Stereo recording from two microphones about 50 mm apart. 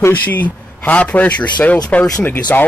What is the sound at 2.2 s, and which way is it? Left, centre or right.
Speech, left.